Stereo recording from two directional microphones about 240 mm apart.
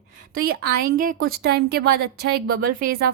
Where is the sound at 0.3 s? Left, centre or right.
Right.